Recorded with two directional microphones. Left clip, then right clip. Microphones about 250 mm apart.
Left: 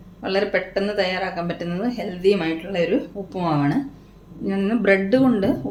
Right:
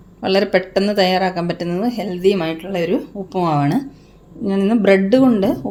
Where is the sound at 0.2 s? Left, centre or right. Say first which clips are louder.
Right 5 dB; right.